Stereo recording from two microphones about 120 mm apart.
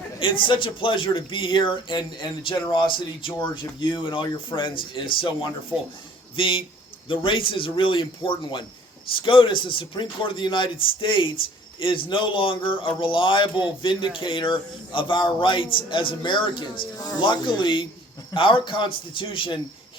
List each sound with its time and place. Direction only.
0.2 s speech: 45° left (ahead or behind)
5.7 s a man's voice: 10° right (ahead or behind)
6.3 s speech: 45° left (ahead or behind)